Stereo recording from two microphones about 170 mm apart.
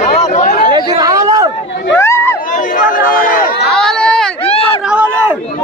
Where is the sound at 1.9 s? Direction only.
15° left (ahead or behind).